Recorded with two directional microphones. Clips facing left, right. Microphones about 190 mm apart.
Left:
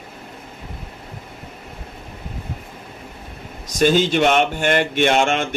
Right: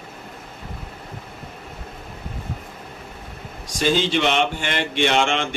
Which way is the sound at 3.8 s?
50° left (ahead or behind).